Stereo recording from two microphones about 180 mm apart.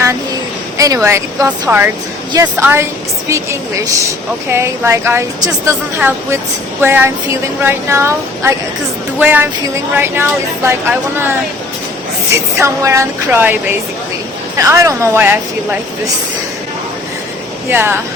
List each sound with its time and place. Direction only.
0.8 s a woman's voice: 15° right (ahead or behind)
12.5 s speech: 15° right (ahead or behind)
14.6 s speech: 15° right (ahead or behind)
17.7 s speech: 10° right (ahead or behind)